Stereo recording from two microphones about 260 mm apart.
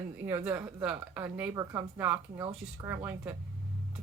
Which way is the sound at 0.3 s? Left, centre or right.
Centre.